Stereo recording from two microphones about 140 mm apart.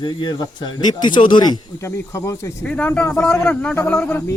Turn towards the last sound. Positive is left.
turn(degrees=15)  # may be behind; listen again after turning